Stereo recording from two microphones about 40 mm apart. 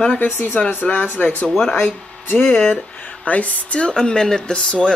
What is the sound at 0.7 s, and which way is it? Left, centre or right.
Speech, left.